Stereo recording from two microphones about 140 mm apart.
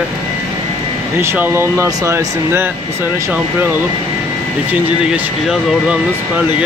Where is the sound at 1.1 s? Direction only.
15° right (ahead or behind).